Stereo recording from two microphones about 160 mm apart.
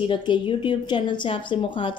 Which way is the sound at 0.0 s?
30° left (ahead or behind).